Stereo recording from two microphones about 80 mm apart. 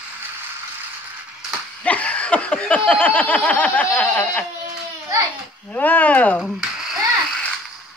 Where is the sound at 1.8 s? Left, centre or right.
Centre.